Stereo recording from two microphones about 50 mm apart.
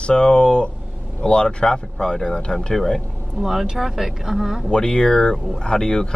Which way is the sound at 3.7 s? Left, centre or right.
Centre.